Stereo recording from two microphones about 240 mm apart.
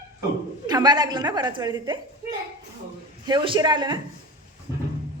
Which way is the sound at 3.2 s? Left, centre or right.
Centre.